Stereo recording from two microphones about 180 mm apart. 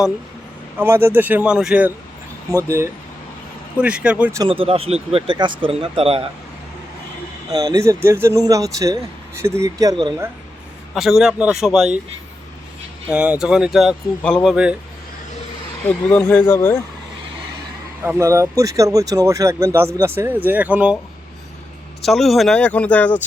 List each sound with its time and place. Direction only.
0.8 s speech: 15° right (ahead or behind)
2.5 s speech: 15° right (ahead or behind)
4.4 s speech: 30° right (ahead or behind)
7.5 s speech: 20° right (ahead or behind)
10.9 s speech: centre (ahead or behind)
13.1 s speech: 5° right (ahead or behind)
14.5 s speech: 5° right (ahead or behind)
15.9 s speech: 5° left (ahead or behind)
18.0 s speech: 15° right (ahead or behind)
22.0 s speech: centre (ahead or behind)